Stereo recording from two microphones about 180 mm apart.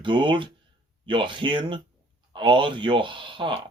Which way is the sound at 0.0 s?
25° right (ahead or behind).